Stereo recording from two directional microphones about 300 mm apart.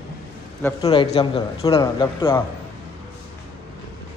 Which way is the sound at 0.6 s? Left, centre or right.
Centre.